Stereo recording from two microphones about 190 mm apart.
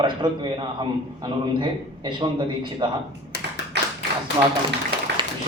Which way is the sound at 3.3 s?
65° left (ahead or behind).